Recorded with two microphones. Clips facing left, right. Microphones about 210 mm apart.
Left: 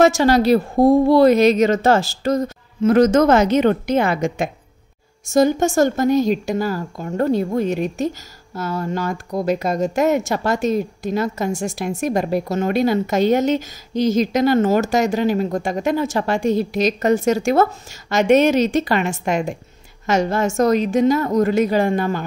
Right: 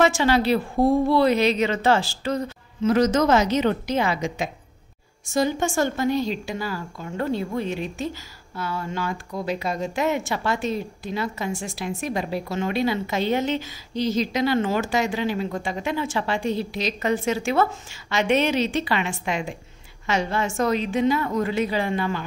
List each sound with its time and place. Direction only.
0.0 s speech: 40° left (ahead or behind)